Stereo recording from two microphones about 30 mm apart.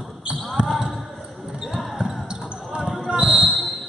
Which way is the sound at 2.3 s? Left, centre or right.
Right.